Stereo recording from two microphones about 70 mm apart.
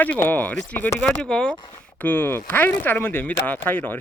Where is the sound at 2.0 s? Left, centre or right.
Left.